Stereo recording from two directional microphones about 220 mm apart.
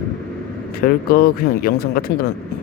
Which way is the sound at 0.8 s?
40° left (ahead or behind).